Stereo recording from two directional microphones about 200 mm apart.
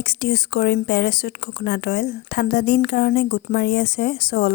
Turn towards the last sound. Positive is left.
turn(degrees=50)  # may be behind; listen again after turning